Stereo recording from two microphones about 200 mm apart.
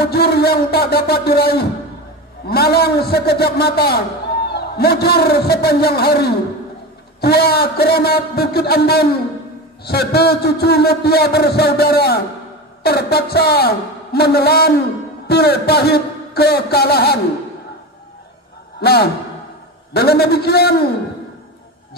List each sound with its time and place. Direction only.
0.0 s a man's voice: 55° left (ahead or behind)
18.8 s a man's voice: 55° left (ahead or behind)